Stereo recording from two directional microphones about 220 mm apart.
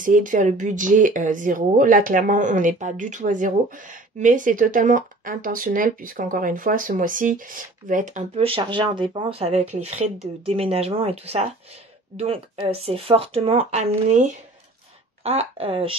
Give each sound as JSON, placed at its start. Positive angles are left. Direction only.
{"t": 0.0, "sound": "speech", "side_deg": -35}
{"t": 12.6, "sound": "speech", "side_deg": -25}